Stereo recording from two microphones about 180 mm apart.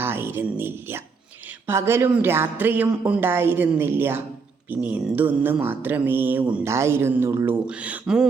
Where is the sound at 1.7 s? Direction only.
15° right (ahead or behind).